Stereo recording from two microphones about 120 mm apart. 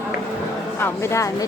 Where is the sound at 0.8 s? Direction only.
25° left (ahead or behind).